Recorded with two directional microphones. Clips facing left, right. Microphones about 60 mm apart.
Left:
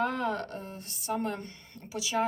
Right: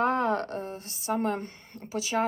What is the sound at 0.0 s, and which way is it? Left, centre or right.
Speech, right.